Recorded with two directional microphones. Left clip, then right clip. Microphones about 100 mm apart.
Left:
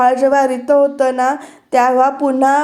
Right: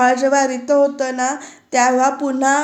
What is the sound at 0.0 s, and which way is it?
A woman's voice, 30° left (ahead or behind).